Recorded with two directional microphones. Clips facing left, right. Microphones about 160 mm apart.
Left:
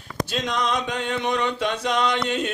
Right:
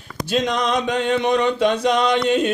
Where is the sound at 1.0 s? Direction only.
20° right (ahead or behind).